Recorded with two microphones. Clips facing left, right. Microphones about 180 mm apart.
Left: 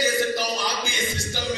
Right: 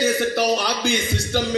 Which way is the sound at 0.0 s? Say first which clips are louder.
Right 4 dB; 65° right (ahead or behind).